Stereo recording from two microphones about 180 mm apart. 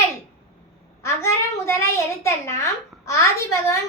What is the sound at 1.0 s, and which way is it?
A child's voice, 15° left (ahead or behind).